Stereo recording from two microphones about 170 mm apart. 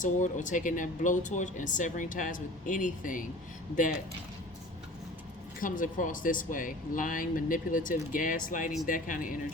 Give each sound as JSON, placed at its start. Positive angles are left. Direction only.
{"t": 0.0, "sound": "speech", "side_deg": 45}
{"t": 5.5, "sound": "speech", "side_deg": 50}